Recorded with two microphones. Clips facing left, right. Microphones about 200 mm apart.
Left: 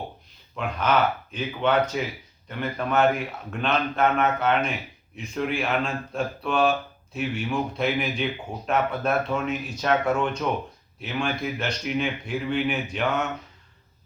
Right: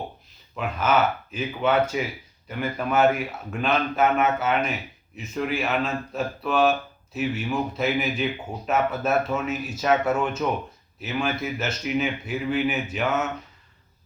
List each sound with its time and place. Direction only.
0.5 s speech: 5° right (ahead or behind)